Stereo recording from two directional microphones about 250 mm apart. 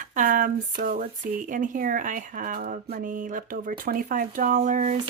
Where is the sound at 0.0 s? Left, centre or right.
Right.